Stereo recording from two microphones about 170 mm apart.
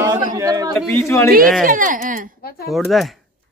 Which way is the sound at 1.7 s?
50° right (ahead or behind).